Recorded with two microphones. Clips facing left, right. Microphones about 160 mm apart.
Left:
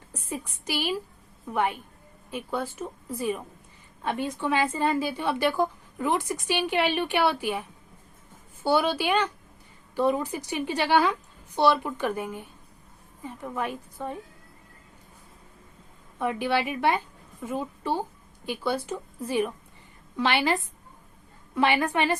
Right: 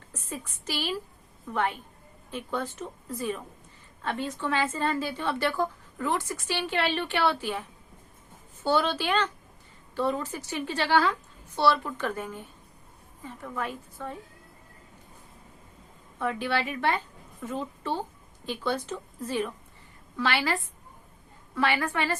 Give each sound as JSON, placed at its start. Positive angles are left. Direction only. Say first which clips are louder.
{"t": 0.1, "sound": "a woman's voice", "louder": "left 3 dB", "side_deg": 15}
{"t": 16.1, "sound": "a woman's voice", "louder": "left 3 dB", "side_deg": 15}